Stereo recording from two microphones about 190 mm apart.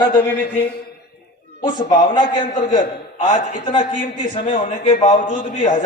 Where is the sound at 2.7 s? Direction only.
40° left (ahead or behind).